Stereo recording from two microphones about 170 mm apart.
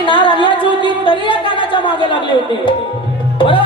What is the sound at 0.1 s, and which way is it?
Music, 30° left (ahead or behind).